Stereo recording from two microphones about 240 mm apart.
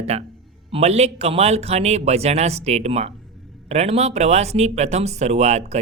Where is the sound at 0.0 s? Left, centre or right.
Right.